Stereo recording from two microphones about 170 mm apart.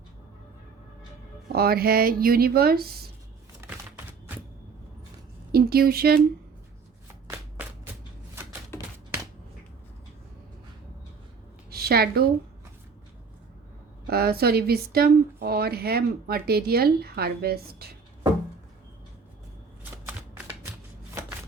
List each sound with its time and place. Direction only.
1.5 s speech: 65° right (ahead or behind)
3.6 s typewriter: 15° right (ahead or behind)
5.5 s speech: 65° right (ahead or behind)
7.6 s a sound: 10° right (ahead or behind)
8.7 s a sound: 15° left (ahead or behind)
11.7 s a woman's voice: 65° right (ahead or behind)
14.1 s speech: 65° right (ahead or behind)
20.1 s shuffling cards: 10° right (ahead or behind)